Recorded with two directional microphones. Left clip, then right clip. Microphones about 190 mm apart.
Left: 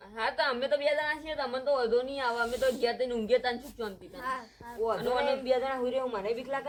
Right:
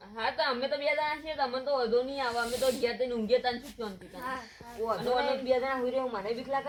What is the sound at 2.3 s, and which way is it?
Speech, 5° left (ahead or behind).